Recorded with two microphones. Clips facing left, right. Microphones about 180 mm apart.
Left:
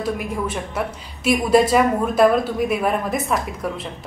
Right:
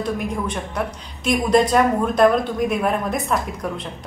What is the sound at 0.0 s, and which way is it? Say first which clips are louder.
A woman's voice: even; 5° left (ahead or behind).